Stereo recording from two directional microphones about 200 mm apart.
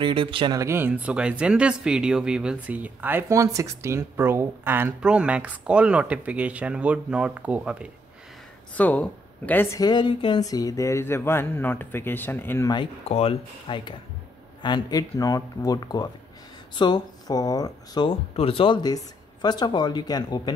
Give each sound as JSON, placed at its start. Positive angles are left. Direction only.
{"t": 0.0, "sound": "speech", "side_deg": -25}
{"t": 8.7, "sound": "speech", "side_deg": 5}
{"t": 13.1, "sound": "speech", "side_deg": 30}